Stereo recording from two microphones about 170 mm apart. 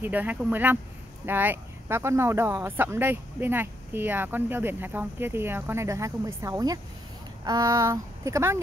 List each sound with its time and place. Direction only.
0.0 s speech: 10° right (ahead or behind)